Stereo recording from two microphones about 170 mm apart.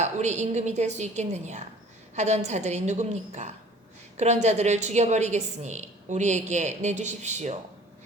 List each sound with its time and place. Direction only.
0.0 s a woman's voice: 40° right (ahead or behind)